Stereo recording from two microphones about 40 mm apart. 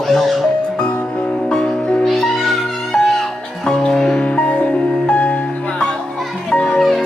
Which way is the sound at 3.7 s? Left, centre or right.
Left.